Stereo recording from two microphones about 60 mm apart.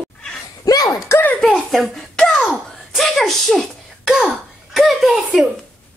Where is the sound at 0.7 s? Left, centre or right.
Left.